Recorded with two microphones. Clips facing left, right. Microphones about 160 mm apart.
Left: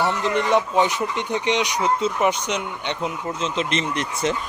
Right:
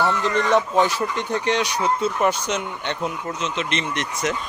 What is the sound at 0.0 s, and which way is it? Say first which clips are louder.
Speech: even; 15° left (ahead or behind).